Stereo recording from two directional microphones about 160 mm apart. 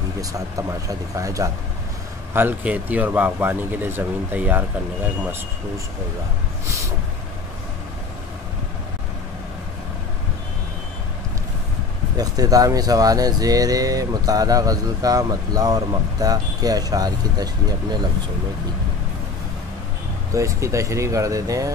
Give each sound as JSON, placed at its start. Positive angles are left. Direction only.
{"t": 0.2, "sound": "speech", "side_deg": -20}
{"t": 12.2, "sound": "speech", "side_deg": -25}
{"t": 20.3, "sound": "speech", "side_deg": -20}